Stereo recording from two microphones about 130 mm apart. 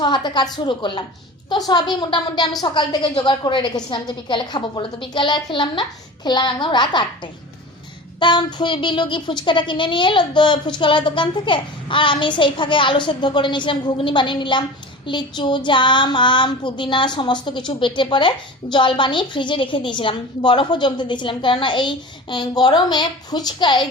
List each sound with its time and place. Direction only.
0.0 s child singing: 35° left (ahead or behind)